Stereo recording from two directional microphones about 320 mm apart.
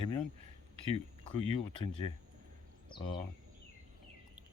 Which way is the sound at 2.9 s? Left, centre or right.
Centre.